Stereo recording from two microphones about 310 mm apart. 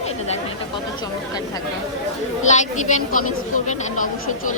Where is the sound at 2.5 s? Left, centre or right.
Left.